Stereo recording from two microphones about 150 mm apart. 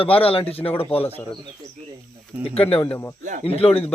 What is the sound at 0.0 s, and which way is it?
Speech, 40° left (ahead or behind).